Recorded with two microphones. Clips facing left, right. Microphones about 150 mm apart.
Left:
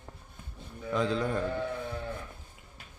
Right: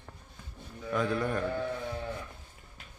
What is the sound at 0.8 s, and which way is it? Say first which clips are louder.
Speech: left 1 dB; 20° left (ahead or behind).